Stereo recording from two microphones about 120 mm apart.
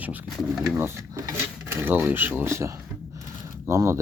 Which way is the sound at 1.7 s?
15° right (ahead or behind).